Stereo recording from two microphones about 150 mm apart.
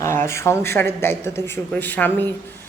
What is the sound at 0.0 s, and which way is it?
Speech, 20° left (ahead or behind).